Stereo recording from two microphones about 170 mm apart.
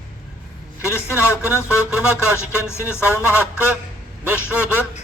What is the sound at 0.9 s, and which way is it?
Speech, 15° left (ahead or behind).